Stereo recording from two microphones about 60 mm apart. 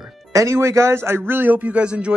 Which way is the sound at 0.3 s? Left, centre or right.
Right.